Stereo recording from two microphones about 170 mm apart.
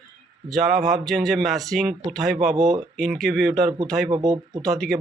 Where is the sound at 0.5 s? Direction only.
Centre (ahead or behind).